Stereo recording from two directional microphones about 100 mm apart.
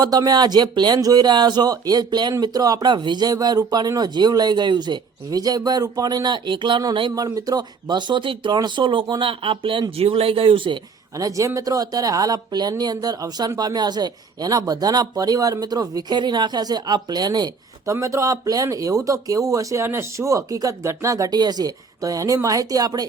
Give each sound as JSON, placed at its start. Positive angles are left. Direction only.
{"t": 0.0, "sound": "speech", "side_deg": -40}
{"t": 7.2, "sound": "speech", "side_deg": -40}
{"t": 10.0, "sound": "speech", "side_deg": -75}
{"t": 11.2, "sound": "speech", "side_deg": -35}
{"t": 17.9, "sound": "speech", "side_deg": -30}